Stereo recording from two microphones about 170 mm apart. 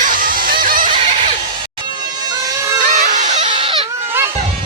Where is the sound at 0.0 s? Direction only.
55° right (ahead or behind).